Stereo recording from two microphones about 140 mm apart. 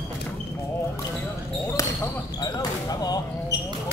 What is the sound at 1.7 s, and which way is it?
Basketball bounce, 20° left (ahead or behind).